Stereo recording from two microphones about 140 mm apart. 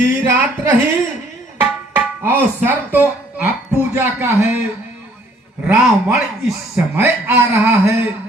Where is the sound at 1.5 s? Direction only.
15° right (ahead or behind).